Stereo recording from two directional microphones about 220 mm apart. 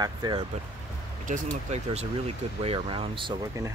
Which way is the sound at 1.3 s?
30° right (ahead or behind).